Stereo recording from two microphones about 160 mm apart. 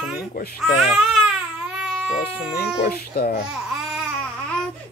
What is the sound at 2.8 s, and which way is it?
Speech, 75° left (ahead or behind).